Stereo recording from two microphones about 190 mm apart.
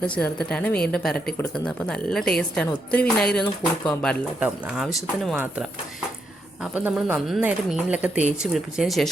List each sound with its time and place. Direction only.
0.0 s a woman's voice: 5° left (ahead or behind)
4.4 s a woman's voice: 5° right (ahead or behind)
6.7 s a woman's voice: 5° right (ahead or behind)